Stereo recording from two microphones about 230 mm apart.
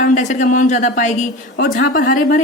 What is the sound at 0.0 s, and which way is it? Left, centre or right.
Speech, left.